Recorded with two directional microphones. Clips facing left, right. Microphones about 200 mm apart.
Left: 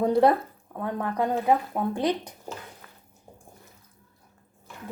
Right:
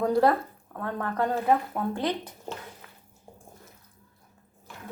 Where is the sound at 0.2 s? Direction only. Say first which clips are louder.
Left 2 dB; 20° left (ahead or behind).